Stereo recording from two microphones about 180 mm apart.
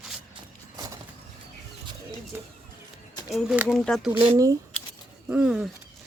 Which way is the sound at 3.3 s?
5° right (ahead or behind).